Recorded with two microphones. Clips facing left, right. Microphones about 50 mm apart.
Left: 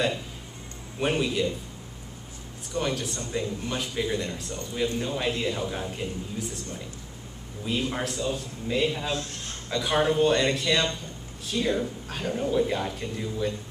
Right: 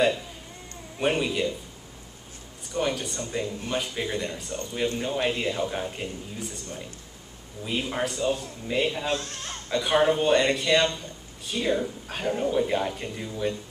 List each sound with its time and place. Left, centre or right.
0.9 s a man's voice: centre
2.7 s a man's voice: centre
7.6 s speech: centre
8.2 s a man's voice: centre
9.7 s speech: centre